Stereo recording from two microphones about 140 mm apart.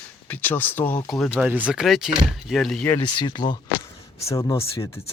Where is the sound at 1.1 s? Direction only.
Centre (ahead or behind).